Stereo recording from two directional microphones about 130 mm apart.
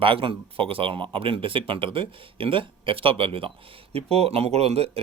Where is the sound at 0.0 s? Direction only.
45° right (ahead or behind).